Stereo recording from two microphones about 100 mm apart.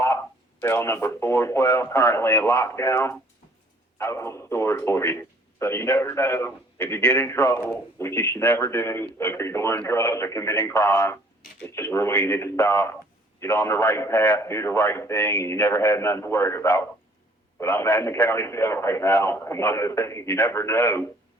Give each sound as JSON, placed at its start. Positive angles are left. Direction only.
{"t": 0.6, "sound": "speech", "side_deg": 25}